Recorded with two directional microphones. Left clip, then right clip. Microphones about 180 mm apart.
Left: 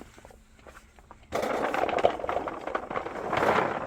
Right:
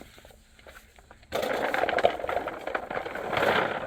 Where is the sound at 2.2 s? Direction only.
25° right (ahead or behind).